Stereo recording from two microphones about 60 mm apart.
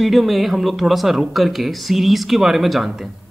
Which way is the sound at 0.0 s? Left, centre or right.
Centre.